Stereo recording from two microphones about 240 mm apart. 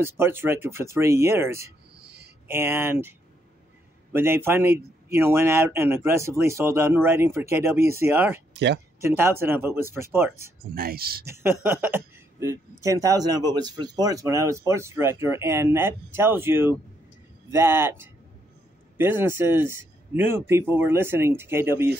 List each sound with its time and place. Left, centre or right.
0.0 s speech: centre
2.0 s a sound: right
2.4 s speech: centre
8.5 s speech: right
9.0 s speech: centre
10.7 s speech: right
11.2 s speech: centre